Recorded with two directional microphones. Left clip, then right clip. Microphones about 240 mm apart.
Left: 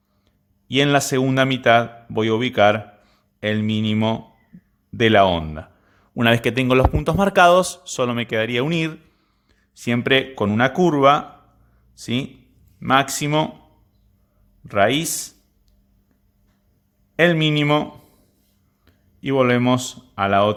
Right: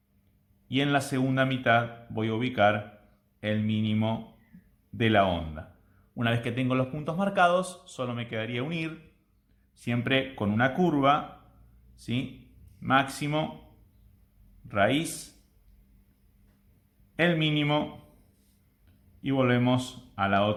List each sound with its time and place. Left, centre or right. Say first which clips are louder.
0.7 s a man's voice: left 10 dB; left
14.7 s a man's voice: left 8 dB; left
17.2 s a man's voice: left 9 dB; left
19.2 s a man's voice: left 8 dB; left